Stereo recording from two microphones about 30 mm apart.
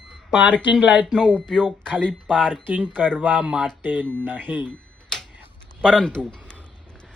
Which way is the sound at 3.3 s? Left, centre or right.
Right.